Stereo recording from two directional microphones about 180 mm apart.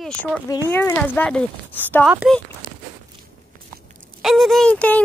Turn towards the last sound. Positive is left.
turn(degrees=5)  # may be behind; listen again after turning